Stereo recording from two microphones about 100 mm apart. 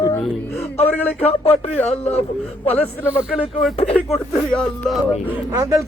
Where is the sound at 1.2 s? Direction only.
80° left.